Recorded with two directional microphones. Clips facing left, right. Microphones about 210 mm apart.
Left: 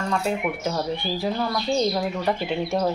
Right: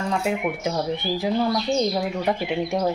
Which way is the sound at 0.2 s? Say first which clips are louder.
Right 1 dB; 15° right (ahead or behind).